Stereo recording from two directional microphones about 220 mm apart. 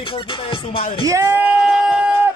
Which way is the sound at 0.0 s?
25° left (ahead or behind).